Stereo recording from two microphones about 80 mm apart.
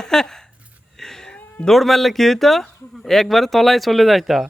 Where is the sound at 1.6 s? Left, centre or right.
Centre.